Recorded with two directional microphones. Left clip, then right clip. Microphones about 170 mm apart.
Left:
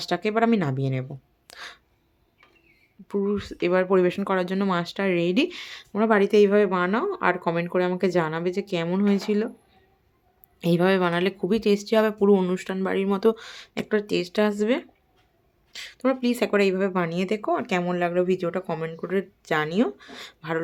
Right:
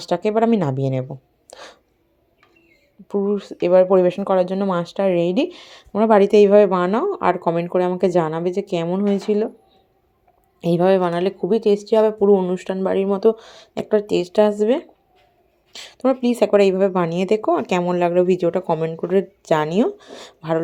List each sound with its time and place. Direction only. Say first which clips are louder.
0.0 s speech: right 5 dB; 5° right (ahead or behind)
1.0 s a sound: right 7 dB; 10° right (ahead or behind)
3.1 s speech: right 5 dB; 5° right (ahead or behind)
5.9 s speech: right 6 dB; 15° right (ahead or behind)
10.6 s speech: right 5 dB; centre (ahead or behind); by 20.6 s 15° right (ahead or behind)